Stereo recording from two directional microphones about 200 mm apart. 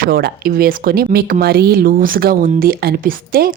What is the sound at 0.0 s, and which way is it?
Speech, 50° right (ahead or behind).